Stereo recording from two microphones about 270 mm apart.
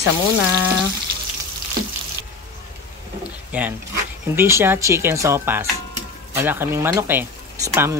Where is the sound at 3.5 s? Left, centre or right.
Centre.